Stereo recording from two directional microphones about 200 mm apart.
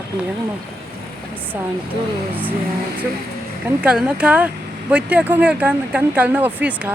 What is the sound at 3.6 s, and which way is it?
Speech, 5° right (ahead or behind).